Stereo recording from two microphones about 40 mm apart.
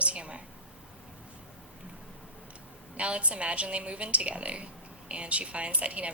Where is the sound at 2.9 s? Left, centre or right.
Right.